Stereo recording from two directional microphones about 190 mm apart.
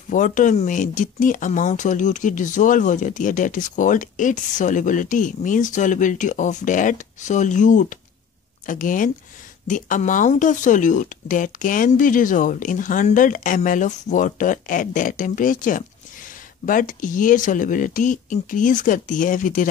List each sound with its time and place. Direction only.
0.1 s speech: 45° left (ahead or behind)